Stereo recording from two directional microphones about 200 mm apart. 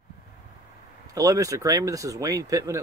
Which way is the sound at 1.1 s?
15° right (ahead or behind).